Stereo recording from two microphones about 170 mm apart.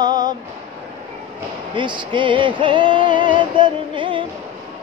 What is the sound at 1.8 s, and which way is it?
Music, 30° right (ahead or behind).